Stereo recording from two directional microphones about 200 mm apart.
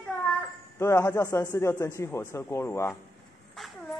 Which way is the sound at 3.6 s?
Centre (ahead or behind).